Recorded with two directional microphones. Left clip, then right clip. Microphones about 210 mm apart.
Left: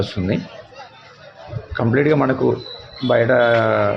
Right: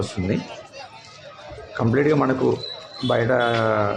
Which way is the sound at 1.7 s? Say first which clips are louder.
Left 3 dB; 10° left (ahead or behind).